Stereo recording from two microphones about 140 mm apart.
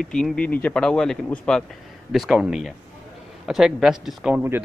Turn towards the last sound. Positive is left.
turn(degrees=-10)  # may be behind; listen again after turning